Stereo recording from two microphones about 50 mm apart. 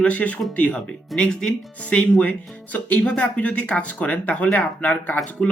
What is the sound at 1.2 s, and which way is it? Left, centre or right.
Speech, centre.